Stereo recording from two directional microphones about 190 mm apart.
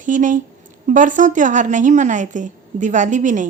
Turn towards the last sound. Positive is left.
turn(degrees=-40)  # may be behind; listen again after turning